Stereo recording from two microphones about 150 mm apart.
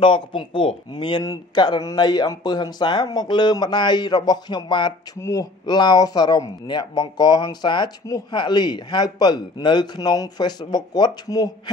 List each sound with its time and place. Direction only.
0.0 s speech: 35° left (ahead or behind)